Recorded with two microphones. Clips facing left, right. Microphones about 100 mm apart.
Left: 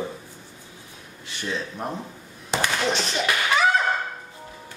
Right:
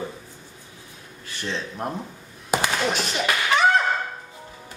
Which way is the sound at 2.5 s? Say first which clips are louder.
Right 1 dB; 10° right (ahead or behind).